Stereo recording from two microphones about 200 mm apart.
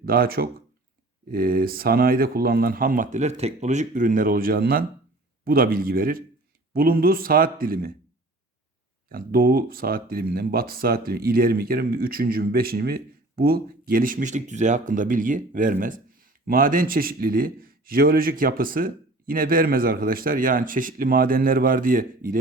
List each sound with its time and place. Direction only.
0.0 s speech: 45° right (ahead or behind)
9.0 s speech: 45° right (ahead or behind)